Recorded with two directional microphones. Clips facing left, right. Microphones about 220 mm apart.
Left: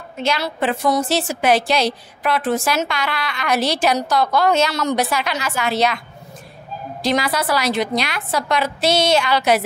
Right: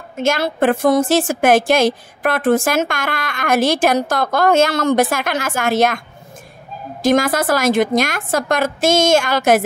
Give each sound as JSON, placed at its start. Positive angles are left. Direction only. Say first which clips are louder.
{"t": 0.2, "sound": "a woman's voice", "louder": "right 5 dB", "side_deg": -50}
{"t": 7.0, "sound": "a woman's voice", "louder": "right 5 dB", "side_deg": -50}